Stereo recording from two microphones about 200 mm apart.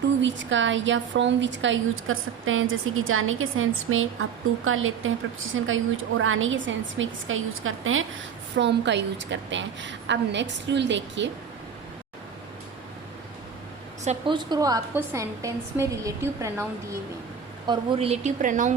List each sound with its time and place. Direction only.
0.2 s a woman's voice: 65° right (ahead or behind)
1.6 s a woman's voice: 75° right (ahead or behind)
8.5 s a woman's voice: 60° right (ahead or behind)
14.0 s a woman's voice: 35° right (ahead or behind)
14.3 s a woman's voice: 20° right (ahead or behind)
17.7 s a woman's voice: 30° right (ahead or behind)